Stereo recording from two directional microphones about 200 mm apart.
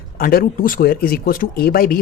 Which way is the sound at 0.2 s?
45° left (ahead or behind).